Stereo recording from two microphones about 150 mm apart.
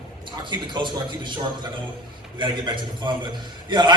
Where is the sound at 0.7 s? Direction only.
30° right (ahead or behind).